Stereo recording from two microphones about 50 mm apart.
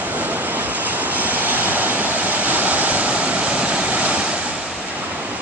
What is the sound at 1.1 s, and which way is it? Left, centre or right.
Waves, right.